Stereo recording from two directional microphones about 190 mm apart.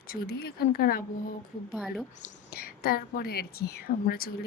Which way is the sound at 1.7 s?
Centre (ahead or behind).